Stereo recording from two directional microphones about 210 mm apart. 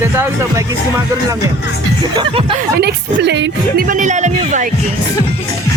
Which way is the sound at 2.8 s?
50° right (ahead or behind).